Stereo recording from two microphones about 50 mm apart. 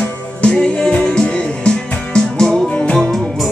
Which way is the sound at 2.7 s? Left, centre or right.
Left.